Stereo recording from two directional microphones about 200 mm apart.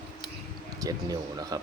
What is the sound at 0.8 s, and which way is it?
Speech, 20° right (ahead or behind).